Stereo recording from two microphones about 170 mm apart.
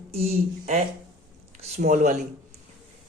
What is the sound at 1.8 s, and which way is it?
Speech, 50° right (ahead or behind).